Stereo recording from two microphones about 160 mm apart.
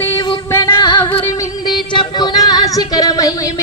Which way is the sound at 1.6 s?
30° left (ahead or behind).